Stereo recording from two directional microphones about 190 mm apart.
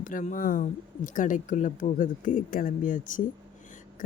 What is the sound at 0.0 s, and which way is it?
Speech, 45° left (ahead or behind).